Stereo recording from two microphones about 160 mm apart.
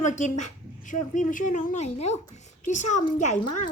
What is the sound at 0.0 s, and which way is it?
A woman's voice, 50° left (ahead or behind).